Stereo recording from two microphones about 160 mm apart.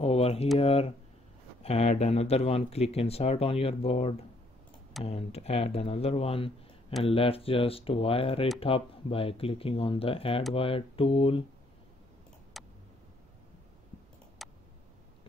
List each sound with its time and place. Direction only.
0.0 s speech: 40° left (ahead or behind)
12.6 s tick: centre (ahead or behind)
14.4 s tick: centre (ahead or behind)